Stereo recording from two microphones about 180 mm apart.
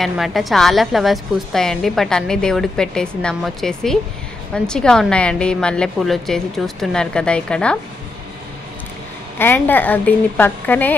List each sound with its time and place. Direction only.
0.0 s a woman's voice: centre (ahead or behind)
9.4 s speech: 10° left (ahead or behind)